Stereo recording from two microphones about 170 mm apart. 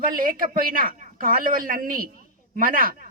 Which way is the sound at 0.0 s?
55° right (ahead or behind).